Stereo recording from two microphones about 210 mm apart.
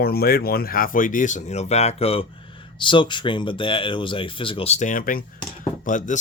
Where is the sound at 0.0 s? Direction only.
45° left (ahead or behind).